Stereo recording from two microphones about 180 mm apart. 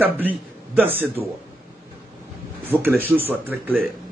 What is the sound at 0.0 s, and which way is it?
A man's voice, 10° right (ahead or behind).